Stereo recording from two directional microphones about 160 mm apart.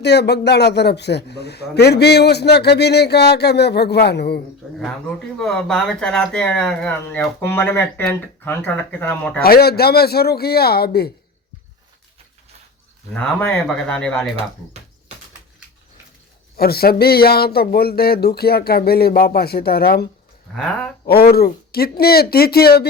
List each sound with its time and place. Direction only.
0.0 s a man's voice: 90° left
5.4 s speech: 5° left (ahead or behind)
9.4 s a man's voice: 75° left (ahead or behind)
13.1 s speech: 10° left (ahead or behind)
16.6 s speech: 75° left (ahead or behind)
21.1 s speech: 75° left (ahead or behind)